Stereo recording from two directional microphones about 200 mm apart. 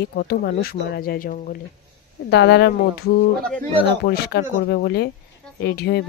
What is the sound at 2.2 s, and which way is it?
Speech, 60° left (ahead or behind).